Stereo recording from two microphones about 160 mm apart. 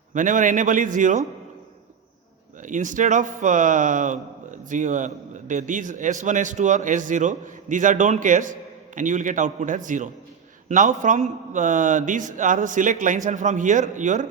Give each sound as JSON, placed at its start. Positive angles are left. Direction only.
{"t": 0.1, "sound": "a man's voice", "side_deg": -55}
{"t": 2.6, "sound": "a man's voice", "side_deg": -55}